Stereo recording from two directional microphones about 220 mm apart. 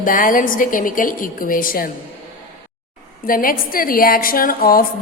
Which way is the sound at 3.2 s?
40° left (ahead or behind).